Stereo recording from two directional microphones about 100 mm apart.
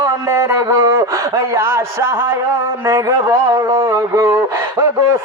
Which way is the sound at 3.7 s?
30° right (ahead or behind).